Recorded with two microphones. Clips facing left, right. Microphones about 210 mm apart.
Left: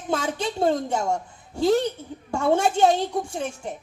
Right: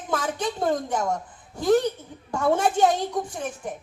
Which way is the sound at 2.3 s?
25° left (ahead or behind).